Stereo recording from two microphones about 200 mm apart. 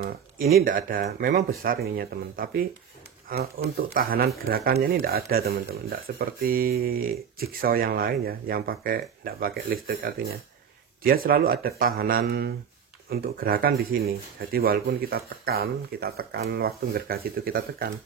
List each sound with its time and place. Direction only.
0.6 s speech: 45° right (ahead or behind)